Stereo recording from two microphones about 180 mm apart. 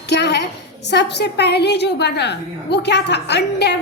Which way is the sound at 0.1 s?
70° left (ahead or behind).